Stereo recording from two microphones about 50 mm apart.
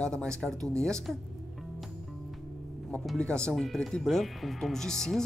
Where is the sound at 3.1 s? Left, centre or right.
Centre.